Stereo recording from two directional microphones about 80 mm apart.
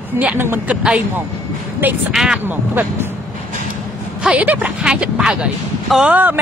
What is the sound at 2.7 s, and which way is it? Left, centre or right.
Speech, right.